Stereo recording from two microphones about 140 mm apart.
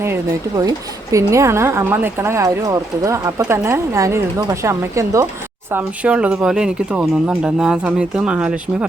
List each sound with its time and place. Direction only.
0.0 s speech: 20° right (ahead or behind)
5.7 s speech: 10° right (ahead or behind)